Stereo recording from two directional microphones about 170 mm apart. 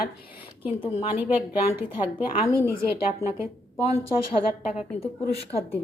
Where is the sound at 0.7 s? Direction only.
30° left (ahead or behind).